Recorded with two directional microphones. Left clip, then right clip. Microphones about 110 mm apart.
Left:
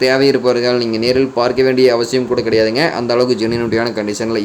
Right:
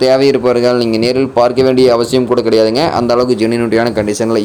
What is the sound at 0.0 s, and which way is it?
Speech, 45° right (ahead or behind).